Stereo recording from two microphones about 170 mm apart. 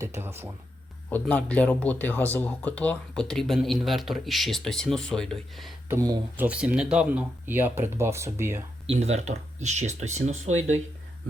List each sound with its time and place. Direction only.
0.2 s speech: 15° right (ahead or behind)
1.1 s speech: 10° left (ahead or behind)
5.9 s speech: 15° right (ahead or behind)
8.9 s speech: 40° right (ahead or behind)